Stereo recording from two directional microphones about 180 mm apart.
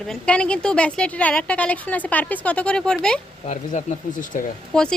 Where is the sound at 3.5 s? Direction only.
45° left (ahead or behind).